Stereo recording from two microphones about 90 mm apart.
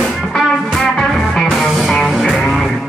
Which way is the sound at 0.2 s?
5° left (ahead or behind).